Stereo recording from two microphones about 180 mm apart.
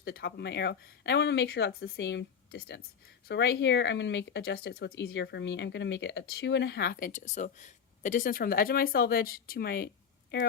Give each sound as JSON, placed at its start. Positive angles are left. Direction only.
{"t": 0.0, "sound": "speech", "side_deg": 65}